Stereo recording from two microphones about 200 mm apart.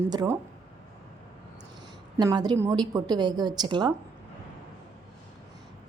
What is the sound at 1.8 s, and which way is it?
Speech, 20° right (ahead or behind).